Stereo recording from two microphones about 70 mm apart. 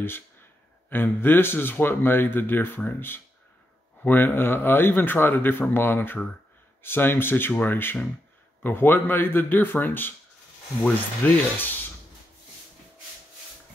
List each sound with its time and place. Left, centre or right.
0.8 s speech: left
11.2 s speech: left